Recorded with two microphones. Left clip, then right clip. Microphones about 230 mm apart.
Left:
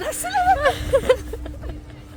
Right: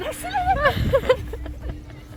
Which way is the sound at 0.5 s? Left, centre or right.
Centre.